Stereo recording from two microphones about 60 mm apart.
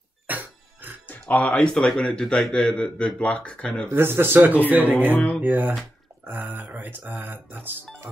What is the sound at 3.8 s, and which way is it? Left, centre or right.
Speech, right.